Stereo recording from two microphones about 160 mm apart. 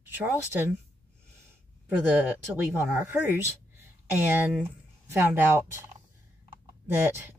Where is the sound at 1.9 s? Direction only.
10° right (ahead or behind).